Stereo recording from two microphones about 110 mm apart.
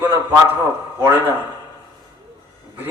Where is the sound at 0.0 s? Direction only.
20° right (ahead or behind).